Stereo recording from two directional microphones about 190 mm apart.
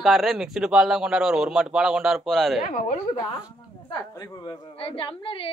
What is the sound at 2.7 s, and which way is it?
Speech, 40° left (ahead or behind).